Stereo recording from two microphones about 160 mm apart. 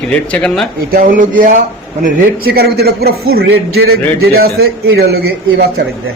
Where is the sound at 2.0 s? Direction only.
75° right (ahead or behind); by 5.8 s 90° right.